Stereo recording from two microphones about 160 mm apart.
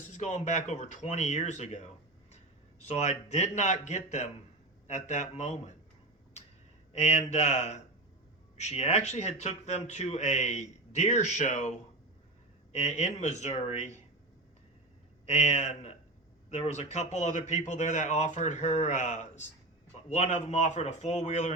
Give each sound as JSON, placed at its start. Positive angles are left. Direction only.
{"t": 0.0, "sound": "speech", "side_deg": 50}
{"t": 6.4, "sound": "a sound", "side_deg": 45}
{"t": 6.9, "sound": "speech", "side_deg": 45}
{"t": 12.7, "sound": "speech", "side_deg": 45}
{"t": 15.3, "sound": "speech", "side_deg": 45}